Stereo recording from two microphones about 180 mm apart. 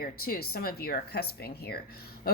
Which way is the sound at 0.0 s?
55° left (ahead or behind).